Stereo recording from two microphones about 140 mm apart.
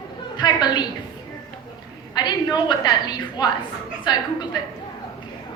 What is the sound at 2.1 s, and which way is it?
A woman's voice, 30° left (ahead or behind).